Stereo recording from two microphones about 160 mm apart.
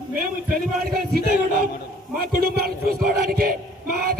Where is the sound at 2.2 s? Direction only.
75° right (ahead or behind).